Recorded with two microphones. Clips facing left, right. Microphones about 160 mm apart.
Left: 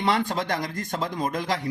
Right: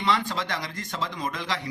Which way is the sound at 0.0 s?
50° left (ahead or behind).